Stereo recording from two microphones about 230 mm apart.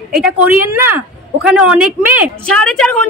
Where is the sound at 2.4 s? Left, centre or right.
Centre.